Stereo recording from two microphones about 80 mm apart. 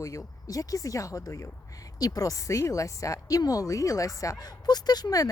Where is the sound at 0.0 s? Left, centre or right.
Left.